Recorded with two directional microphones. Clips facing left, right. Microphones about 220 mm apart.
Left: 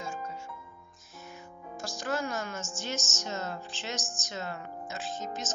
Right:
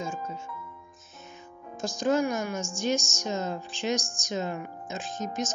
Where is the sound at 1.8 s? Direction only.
15° right (ahead or behind).